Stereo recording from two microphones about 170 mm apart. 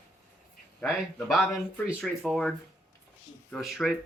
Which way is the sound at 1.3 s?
Centre (ahead or behind).